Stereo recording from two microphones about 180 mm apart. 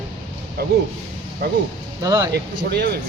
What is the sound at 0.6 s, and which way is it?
Speech, 60° right (ahead or behind).